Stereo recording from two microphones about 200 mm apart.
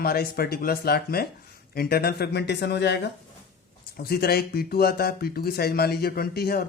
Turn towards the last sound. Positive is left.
turn(degrees=50)  # may be behind; listen again after turning